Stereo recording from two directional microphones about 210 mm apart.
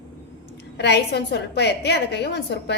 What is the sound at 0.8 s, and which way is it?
A woman's voice, 55° left (ahead or behind).